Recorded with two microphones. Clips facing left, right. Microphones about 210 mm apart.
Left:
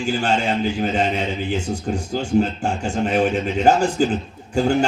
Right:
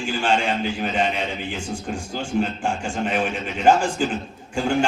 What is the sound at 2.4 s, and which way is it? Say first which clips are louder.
Speech: left 3 dB; 40° left (ahead or behind).